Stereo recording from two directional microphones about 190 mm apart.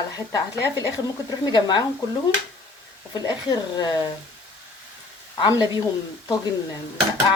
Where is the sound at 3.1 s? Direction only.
20° left (ahead or behind).